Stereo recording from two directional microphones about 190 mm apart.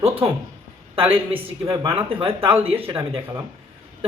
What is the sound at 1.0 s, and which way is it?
Speech, 30° right (ahead or behind).